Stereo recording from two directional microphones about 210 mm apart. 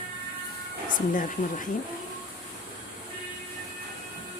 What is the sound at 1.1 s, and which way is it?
Speech, 40° left (ahead or behind).